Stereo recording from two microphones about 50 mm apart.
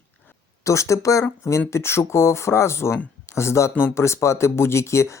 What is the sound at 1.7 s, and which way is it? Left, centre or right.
Speech, left.